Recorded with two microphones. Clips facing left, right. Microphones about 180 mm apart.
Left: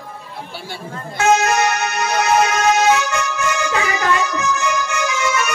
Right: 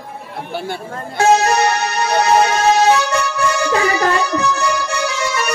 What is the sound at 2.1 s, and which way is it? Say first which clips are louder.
Music: right 3 dB; 35° right (ahead or behind).